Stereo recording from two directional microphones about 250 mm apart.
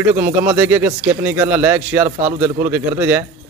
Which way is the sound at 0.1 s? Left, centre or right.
Centre.